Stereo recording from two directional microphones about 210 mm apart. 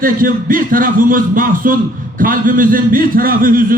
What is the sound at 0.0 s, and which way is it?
A man's voice, 40° right (ahead or behind).